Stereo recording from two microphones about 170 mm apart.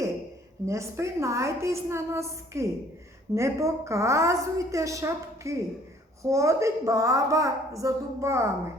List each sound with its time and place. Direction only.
0.6 s a woman's voice: 15° right (ahead or behind)